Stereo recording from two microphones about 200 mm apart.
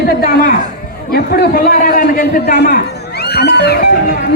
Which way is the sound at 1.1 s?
50° left (ahead or behind).